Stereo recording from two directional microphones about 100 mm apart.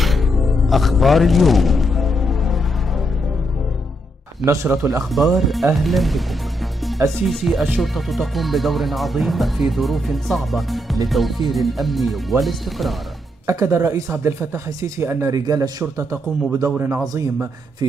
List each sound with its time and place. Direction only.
0.0 s music: centre (ahead or behind)
4.5 s speech: 25° right (ahead or behind)
5.1 s speech: centre (ahead or behind)
13.5 s speech: 30° right (ahead or behind)
15.3 s speech: 40° right (ahead or behind)
15.8 s speech: 25° right (ahead or behind)